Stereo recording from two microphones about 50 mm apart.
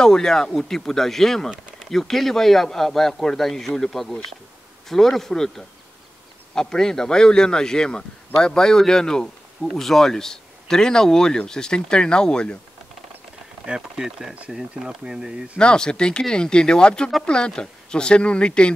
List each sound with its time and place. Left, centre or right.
0.0 s a man's voice: centre
13.7 s speech: centre
15.6 s a man's voice: centre